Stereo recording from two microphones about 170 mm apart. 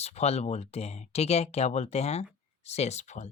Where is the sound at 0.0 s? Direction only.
40° left (ahead or behind).